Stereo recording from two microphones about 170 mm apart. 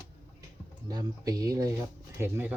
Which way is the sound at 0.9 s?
20° right (ahead or behind).